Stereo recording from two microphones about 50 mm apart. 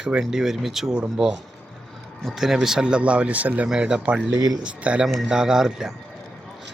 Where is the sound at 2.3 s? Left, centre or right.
Centre; by 3.6 s right.